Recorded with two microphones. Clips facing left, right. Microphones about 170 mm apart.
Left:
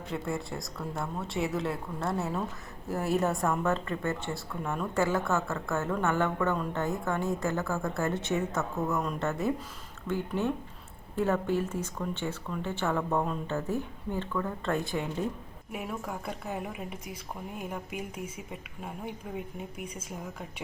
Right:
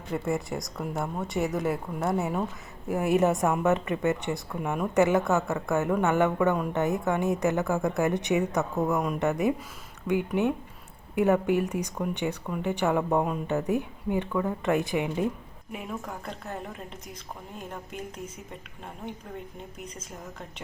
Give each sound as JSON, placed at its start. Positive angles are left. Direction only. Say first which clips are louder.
{"t": 0.3, "sound": "speech", "louder": "right 5 dB", "side_deg": -20}
{"t": 15.7, "sound": "a woman's voice", "louder": "even", "side_deg": 5}